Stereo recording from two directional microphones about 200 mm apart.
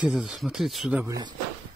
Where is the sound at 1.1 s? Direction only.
20° right (ahead or behind).